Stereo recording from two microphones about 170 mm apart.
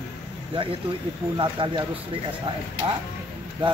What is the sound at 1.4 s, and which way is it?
Speech, 30° right (ahead or behind).